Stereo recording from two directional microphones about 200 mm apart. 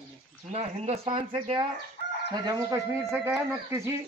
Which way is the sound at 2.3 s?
15° right (ahead or behind).